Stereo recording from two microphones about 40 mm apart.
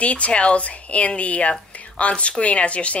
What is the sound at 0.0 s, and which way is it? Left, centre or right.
A woman's voice, left.